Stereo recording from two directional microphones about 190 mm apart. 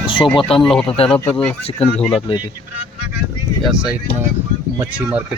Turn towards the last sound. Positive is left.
turn(degrees=-10)  # may be behind; listen again after turning